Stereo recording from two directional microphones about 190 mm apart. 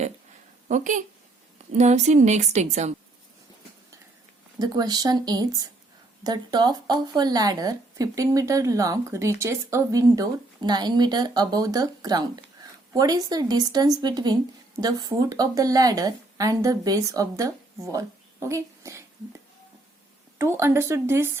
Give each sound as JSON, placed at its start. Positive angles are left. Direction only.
{"t": 0.7, "sound": "a woman's voice", "side_deg": -40}
{"t": 4.6, "sound": "speech", "side_deg": -20}
{"t": 20.4, "sound": "speech", "side_deg": -15}